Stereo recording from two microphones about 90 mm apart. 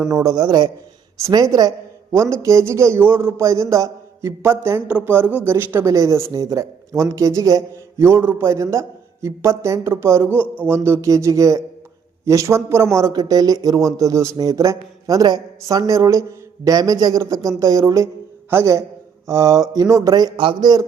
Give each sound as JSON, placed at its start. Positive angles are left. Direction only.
{"t": 0.1, "sound": "speech", "side_deg": -40}
{"t": 0.4, "sound": "a man's voice", "side_deg": -50}
{"t": 1.2, "sound": "a man's voice", "side_deg": -40}
{"t": 8.5, "sound": "a man's voice", "side_deg": -35}
{"t": 20.3, "sound": "a man's voice", "side_deg": -65}